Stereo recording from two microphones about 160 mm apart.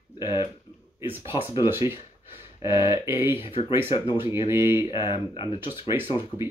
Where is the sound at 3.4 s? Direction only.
35° left (ahead or behind).